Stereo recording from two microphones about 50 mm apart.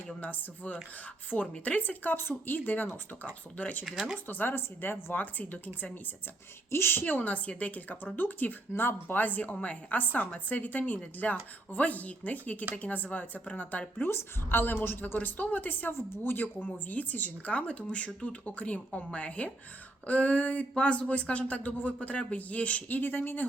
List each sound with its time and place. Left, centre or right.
0.2 s speech: left
3.8 s speech: centre
4.3 s speech: left
6.7 s a woman's voice: left
7.0 s speech: left
8.7 s speech: left
14.1 s a woman's voice: left
15.9 s a woman's voice: left